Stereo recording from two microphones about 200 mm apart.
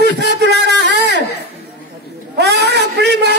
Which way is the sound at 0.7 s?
60° right (ahead or behind).